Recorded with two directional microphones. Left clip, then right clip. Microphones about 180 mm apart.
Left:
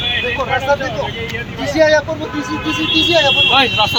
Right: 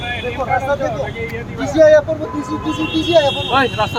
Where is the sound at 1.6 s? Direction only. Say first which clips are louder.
Right 3 dB; 20° right (ahead or behind).